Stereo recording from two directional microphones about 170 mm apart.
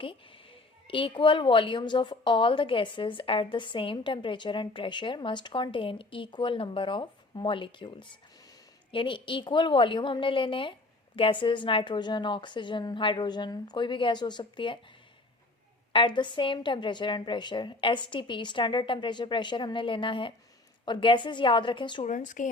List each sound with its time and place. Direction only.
0.0 s a woman's voice: 30° left (ahead or behind)
15.9 s a woman's voice: 30° left (ahead or behind)
22.0 s speech: 45° left (ahead or behind)